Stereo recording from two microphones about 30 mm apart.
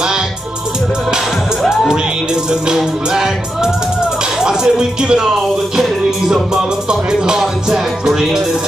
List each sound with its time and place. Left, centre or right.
2.7 s music: right
4.4 s speech: right
5.8 s music: centre
6.5 s music: right